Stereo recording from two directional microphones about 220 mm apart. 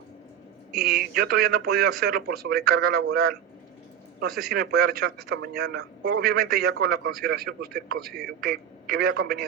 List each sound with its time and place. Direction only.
0.8 s a man's voice: 45° right (ahead or behind)